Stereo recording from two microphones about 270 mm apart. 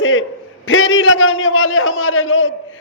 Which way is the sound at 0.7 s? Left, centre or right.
Left.